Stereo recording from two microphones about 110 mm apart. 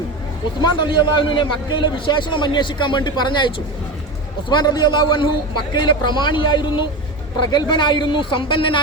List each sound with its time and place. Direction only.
0.6 s a man's voice: 45° left (ahead or behind)